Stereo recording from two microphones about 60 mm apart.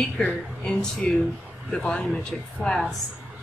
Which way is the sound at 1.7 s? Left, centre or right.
Centre.